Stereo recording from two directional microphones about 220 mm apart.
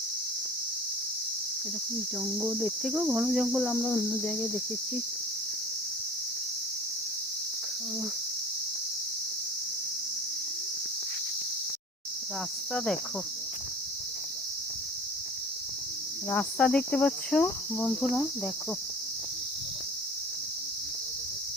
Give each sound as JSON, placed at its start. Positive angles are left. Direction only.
{"t": 2.4, "sound": "cricket", "side_deg": -10}
{"t": 12.7, "sound": "cricket", "side_deg": 0}
{"t": 16.3, "sound": "cricket", "side_deg": 5}